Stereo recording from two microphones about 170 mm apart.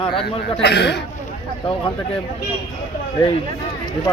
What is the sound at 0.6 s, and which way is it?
Speech, 80° left.